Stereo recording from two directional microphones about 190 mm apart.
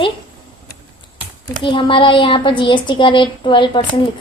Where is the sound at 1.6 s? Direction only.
25° left (ahead or behind).